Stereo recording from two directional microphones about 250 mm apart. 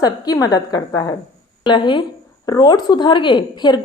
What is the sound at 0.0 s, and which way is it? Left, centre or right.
A woman's voice, centre.